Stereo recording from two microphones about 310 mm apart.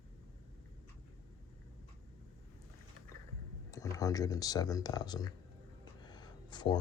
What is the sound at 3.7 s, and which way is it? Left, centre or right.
Speech, centre.